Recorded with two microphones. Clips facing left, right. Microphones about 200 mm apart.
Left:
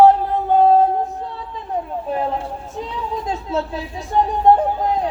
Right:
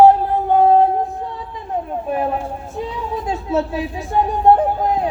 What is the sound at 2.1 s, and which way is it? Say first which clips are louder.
Speech: right 2 dB; 15° right (ahead or behind).